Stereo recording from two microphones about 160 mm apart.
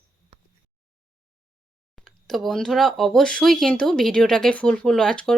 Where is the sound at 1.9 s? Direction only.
Centre (ahead or behind).